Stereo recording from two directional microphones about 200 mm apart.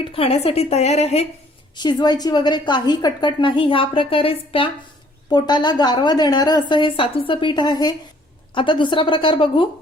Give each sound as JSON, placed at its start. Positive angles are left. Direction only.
{"t": 0.0, "sound": "a woman's voice", "side_deg": 30}
{"t": 1.7, "sound": "a woman's voice", "side_deg": 20}